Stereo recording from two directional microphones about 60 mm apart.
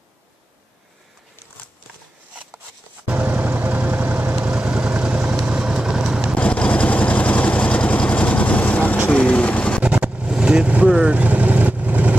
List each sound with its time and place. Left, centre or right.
3.1 s vehicle: right
6.3 s vehicle: left
9.8 s vehicle: centre